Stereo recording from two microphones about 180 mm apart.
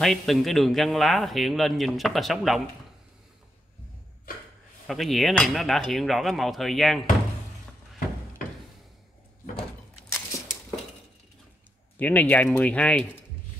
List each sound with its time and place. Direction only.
0.0 s speech: centre (ahead or behind)
4.3 s a sound: 50° left (ahead or behind)
4.8 s speech: centre (ahead or behind)
12.0 s speech: 10° left (ahead or behind)